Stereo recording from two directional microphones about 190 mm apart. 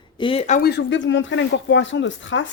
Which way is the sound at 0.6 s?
60° left (ahead or behind).